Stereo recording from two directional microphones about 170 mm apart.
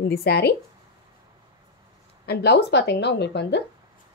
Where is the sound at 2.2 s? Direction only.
70° left (ahead or behind); by 3.6 s 90° left.